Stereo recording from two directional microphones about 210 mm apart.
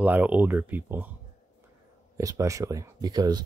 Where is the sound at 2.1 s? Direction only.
15° right (ahead or behind).